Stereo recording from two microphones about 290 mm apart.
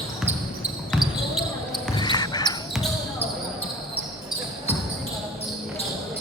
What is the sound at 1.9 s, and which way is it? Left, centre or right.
Basketball bounce, centre.